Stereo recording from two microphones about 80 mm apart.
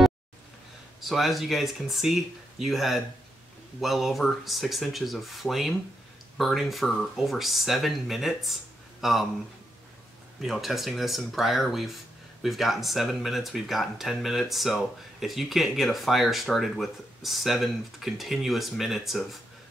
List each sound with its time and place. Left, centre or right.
1.0 s speech: centre
10.4 s speech: centre